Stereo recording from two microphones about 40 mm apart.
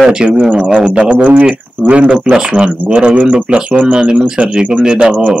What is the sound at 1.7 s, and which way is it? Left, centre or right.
A man's voice, right.